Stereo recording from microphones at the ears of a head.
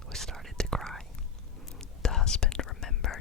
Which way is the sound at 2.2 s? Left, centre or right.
Left.